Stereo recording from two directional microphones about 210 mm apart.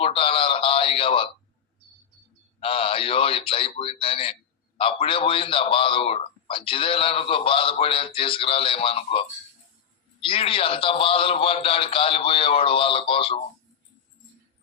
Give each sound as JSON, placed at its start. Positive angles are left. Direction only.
{"t": 0.0, "sound": "a sound", "side_deg": 25}
{"t": 2.6, "sound": "a man's voice", "side_deg": 25}
{"t": 10.2, "sound": "a man's voice", "side_deg": 25}